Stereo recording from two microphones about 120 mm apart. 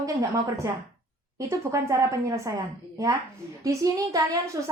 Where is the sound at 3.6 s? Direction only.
30° right (ahead or behind).